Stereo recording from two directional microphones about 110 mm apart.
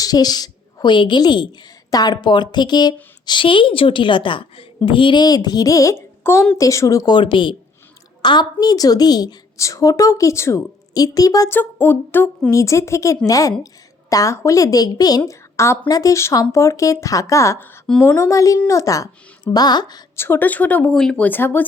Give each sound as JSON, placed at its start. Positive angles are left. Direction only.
{"t": 0.0, "sound": "a woman's voice", "side_deg": 35}
{"t": 11.5, "sound": "a woman's voice", "side_deg": 20}
{"t": 20.1, "sound": "speech", "side_deg": 20}
{"t": 21.2, "sound": "speech", "side_deg": 20}